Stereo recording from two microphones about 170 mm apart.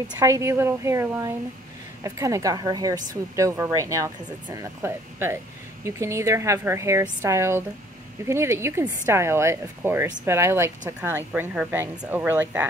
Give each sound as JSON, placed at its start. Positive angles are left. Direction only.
{"t": 0.2, "sound": "speech", "side_deg": -15}